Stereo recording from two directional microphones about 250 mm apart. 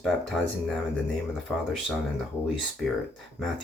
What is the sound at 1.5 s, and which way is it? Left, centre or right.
Speech, centre.